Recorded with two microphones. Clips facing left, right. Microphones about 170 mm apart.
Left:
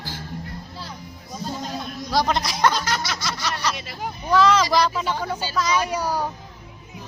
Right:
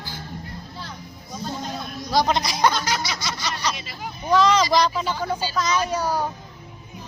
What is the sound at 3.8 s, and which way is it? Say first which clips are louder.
Speech: left 3 dB; 60° left (ahead or behind).